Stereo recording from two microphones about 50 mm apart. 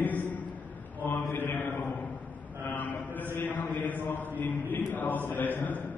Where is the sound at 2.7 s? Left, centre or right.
Left.